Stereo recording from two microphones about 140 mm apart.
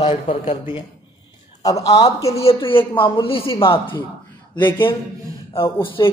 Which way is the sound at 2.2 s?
45° left (ahead or behind).